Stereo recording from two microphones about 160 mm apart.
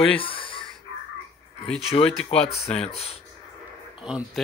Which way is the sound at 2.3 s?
40° left (ahead or behind).